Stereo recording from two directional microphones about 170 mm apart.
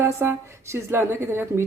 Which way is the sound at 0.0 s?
15° right (ahead or behind).